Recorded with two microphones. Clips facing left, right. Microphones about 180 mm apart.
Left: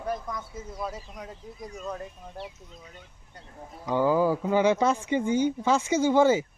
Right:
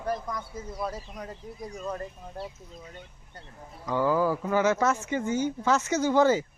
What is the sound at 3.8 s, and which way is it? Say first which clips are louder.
Speech: left 2 dB; 20° left (ahead or behind).